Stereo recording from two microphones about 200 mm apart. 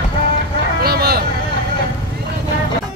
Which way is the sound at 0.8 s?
50° right (ahead or behind).